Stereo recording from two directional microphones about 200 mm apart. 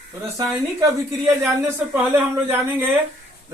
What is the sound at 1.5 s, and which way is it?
A woman's voice, 15° right (ahead or behind).